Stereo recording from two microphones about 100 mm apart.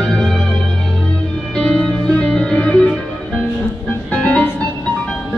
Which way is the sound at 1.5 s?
5° left (ahead or behind).